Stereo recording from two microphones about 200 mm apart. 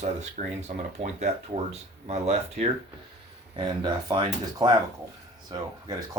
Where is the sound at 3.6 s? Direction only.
20° right (ahead or behind).